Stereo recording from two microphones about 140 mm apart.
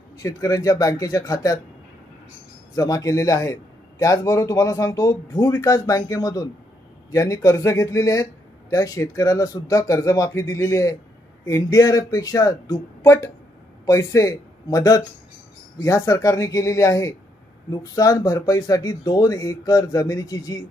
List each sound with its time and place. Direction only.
0.2 s a man's voice: 25° left (ahead or behind)
2.7 s a man's voice: 25° left (ahead or behind)